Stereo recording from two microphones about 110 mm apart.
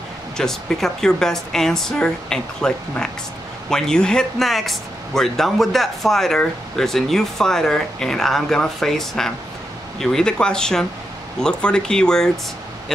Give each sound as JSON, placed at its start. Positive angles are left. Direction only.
{"t": 0.4, "sound": "speech", "side_deg": 5}